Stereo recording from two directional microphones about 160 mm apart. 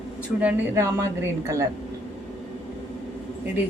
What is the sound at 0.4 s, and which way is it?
A woman's voice, 15° right (ahead or behind).